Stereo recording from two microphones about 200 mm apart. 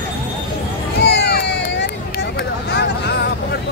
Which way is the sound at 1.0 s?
55° left (ahead or behind).